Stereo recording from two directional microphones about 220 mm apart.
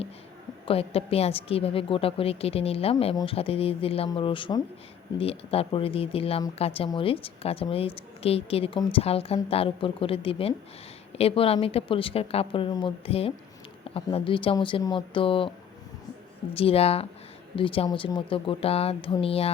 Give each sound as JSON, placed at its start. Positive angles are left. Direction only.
{"t": 0.6, "sound": "speech", "side_deg": 25}
{"t": 16.6, "sound": "speech", "side_deg": 25}